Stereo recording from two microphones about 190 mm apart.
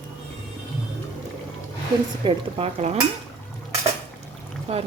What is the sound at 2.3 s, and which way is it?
Speech, 35° right (ahead or behind).